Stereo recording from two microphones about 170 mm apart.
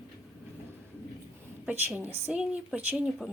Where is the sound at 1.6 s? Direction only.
10° right (ahead or behind).